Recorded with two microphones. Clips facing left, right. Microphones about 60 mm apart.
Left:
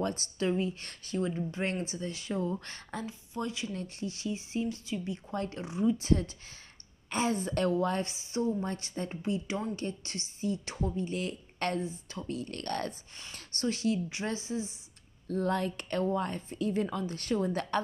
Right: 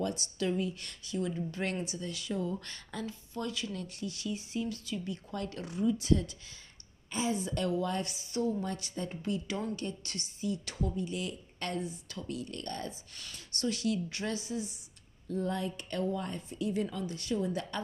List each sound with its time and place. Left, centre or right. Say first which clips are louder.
0.0 s a woman's voice: left 2 dB; left
1.5 s a woman's voice: left 2 dB; left
7.1 s a woman's voice: left 3 dB; left
9.2 s a woman's voice: left 2 dB; left
11.8 s a woman's voice: left 2 dB; left
12.4 s speech: left 4 dB; left
13.1 s a woman's voice: left 1 dB; left
15.2 s a woman's voice: left 3 dB; left